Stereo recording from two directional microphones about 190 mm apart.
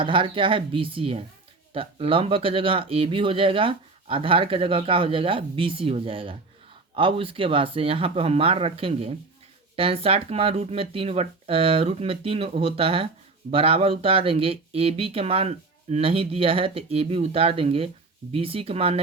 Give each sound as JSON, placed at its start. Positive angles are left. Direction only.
{"t": 0.0, "sound": "speech", "side_deg": -25}